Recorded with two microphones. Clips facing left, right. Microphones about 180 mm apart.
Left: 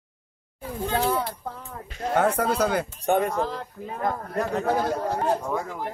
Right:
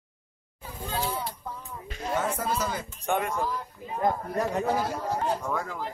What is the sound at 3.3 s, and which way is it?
Speech, 70° left (ahead or behind).